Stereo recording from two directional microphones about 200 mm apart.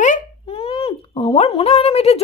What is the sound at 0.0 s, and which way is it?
A child's voice, 35° left (ahead or behind).